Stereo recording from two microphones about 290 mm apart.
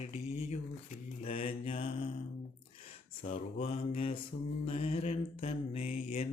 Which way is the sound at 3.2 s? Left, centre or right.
Left.